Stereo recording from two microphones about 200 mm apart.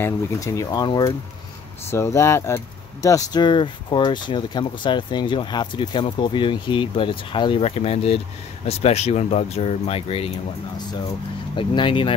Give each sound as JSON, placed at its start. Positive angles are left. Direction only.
{"t": 0.0, "sound": "speech", "side_deg": 15}
{"t": 11.5, "sound": "speech", "side_deg": 25}